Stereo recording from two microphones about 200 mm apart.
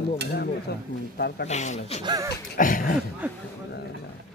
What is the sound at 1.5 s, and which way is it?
Speech, 35° left (ahead or behind).